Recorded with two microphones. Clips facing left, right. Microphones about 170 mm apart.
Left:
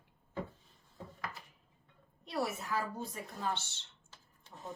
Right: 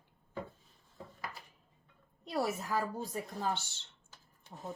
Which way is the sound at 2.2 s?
40° right (ahead or behind).